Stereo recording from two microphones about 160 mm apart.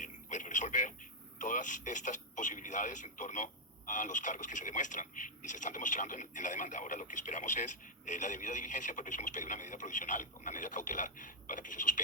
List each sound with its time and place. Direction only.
0.0 s radio: 50° left (ahead or behind)
1.4 s speech: 50° left (ahead or behind)